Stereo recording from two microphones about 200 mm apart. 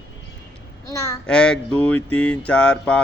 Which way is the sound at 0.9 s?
15° left (ahead or behind).